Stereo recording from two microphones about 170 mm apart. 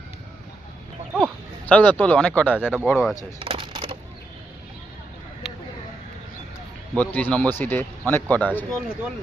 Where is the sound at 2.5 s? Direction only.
5° right (ahead or behind).